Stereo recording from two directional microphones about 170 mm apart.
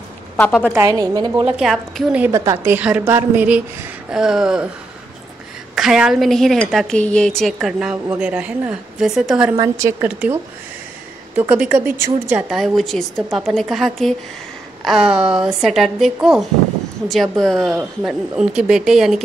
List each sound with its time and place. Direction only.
0.5 s speech: centre (ahead or behind)
0.7 s a woman's voice: 20° right (ahead or behind)
1.4 s a woman's voice: centre (ahead or behind)
5.8 s speech: 5° right (ahead or behind)
9.6 s a woman's voice: 15° right (ahead or behind)